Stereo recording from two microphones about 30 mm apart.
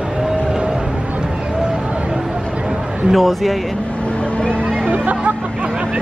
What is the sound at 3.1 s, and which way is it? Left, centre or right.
Speech, centre.